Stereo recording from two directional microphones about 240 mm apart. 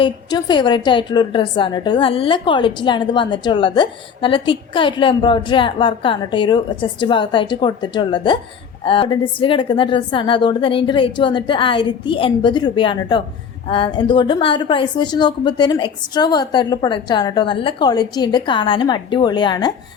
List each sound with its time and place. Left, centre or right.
0.0 s a woman's voice: centre